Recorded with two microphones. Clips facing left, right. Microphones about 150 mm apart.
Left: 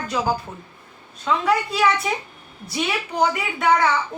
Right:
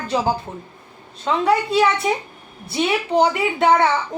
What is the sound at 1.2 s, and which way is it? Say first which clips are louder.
Speech: right 3 dB; 25° right (ahead or behind).